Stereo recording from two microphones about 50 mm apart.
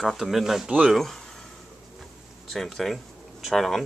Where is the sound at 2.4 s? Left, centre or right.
Centre.